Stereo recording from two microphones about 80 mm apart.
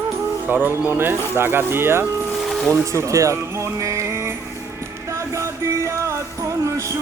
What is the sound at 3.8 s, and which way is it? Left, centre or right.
Music, right.